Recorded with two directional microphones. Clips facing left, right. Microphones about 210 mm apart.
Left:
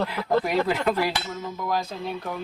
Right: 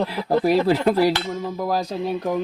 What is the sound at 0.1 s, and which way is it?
Speech, 35° right (ahead or behind).